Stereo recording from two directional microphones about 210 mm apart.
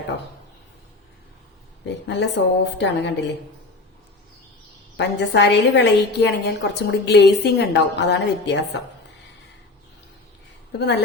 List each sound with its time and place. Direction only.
2.0 s a woman's voice: 55° left (ahead or behind)
4.9 s a woman's voice: 55° left (ahead or behind)
10.7 s a woman's voice: 55° left (ahead or behind)